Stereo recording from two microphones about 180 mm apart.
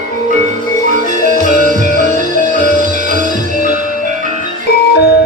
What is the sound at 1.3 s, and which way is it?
Music, 55° left (ahead or behind).